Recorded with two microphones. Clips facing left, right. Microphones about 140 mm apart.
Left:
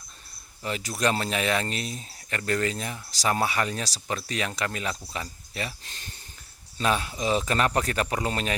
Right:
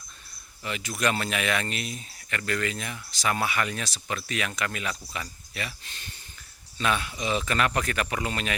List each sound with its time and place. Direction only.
0.6 s speech: 35° left (ahead or behind)